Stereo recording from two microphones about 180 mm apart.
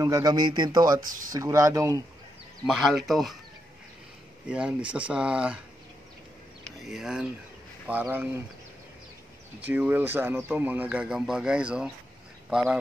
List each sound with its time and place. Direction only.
0.0 s speech: 20° right (ahead or behind)
2.6 s speech: centre (ahead or behind)
4.5 s speech: 5° right (ahead or behind)
6.9 s speech: 5° right (ahead or behind)
9.6 s speech: 10° right (ahead or behind)